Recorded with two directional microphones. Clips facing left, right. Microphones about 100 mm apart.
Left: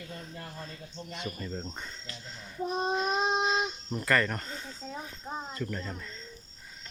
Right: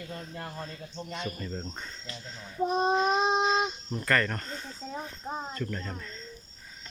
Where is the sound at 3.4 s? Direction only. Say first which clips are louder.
Right 3 dB; 5° left (ahead or behind).